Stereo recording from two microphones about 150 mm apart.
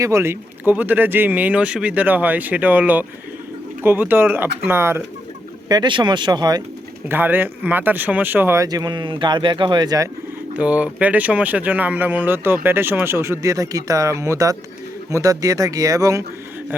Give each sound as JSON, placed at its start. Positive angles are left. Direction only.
{"t": 0.0, "sound": "speech", "side_deg": -20}
{"t": 5.6, "sound": "speech", "side_deg": -30}
{"t": 7.1, "sound": "speech", "side_deg": -15}
{"t": 10.5, "sound": "speech", "side_deg": -10}